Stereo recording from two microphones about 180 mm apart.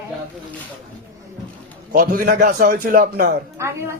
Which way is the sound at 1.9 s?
50° right (ahead or behind).